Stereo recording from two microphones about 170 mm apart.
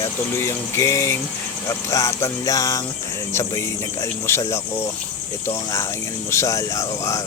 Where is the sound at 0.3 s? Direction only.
15° left (ahead or behind).